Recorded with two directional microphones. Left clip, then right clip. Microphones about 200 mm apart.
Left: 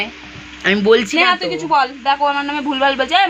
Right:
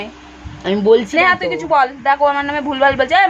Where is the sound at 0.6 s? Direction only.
Centre (ahead or behind).